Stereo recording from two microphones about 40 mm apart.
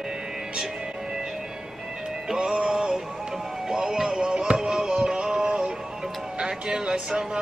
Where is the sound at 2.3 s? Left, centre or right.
Right.